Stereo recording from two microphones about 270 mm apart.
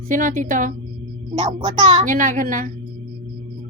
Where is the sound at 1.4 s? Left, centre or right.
Centre.